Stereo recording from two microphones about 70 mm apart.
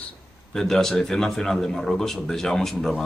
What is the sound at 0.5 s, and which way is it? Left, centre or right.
Speech, centre.